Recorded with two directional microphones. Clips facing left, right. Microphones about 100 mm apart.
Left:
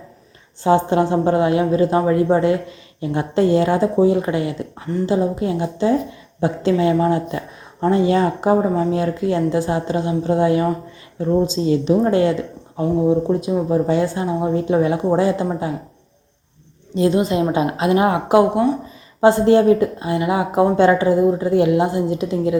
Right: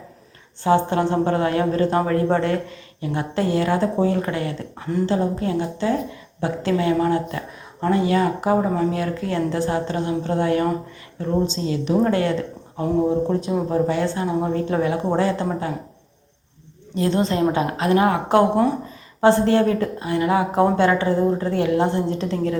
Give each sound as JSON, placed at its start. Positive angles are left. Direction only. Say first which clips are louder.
{"t": 0.6, "sound": "speech", "louder": "left 3 dB", "side_deg": 20}
{"t": 17.1, "sound": "speech", "louder": "left 1 dB", "side_deg": 15}
{"t": 18.3, "sound": "speech", "louder": "left 2 dB", "side_deg": 0}
{"t": 19.2, "sound": "speech", "louder": "left 3 dB", "side_deg": 15}